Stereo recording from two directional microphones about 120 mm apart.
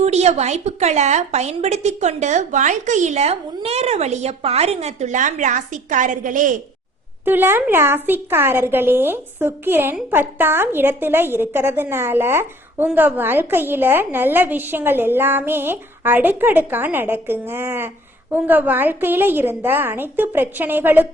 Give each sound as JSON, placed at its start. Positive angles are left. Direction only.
{"t": 0.0, "sound": "a woman's voice", "side_deg": -65}
{"t": 7.3, "sound": "a woman's voice", "side_deg": -15}